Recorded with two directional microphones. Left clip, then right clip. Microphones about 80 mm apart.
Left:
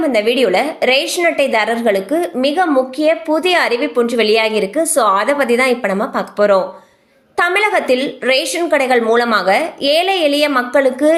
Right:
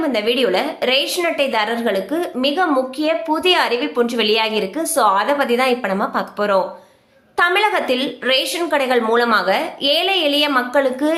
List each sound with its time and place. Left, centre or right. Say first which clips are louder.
0.0 s a woman's voice: left 4 dB; left
4.3 s a woman's voice: left 4 dB; left